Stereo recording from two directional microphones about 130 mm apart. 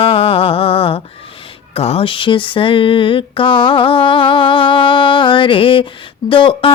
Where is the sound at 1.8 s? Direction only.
50° left (ahead or behind).